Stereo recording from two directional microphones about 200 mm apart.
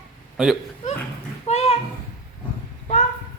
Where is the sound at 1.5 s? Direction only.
30° left (ahead or behind).